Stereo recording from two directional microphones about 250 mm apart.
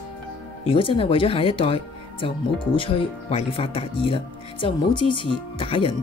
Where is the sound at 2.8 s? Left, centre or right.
Left.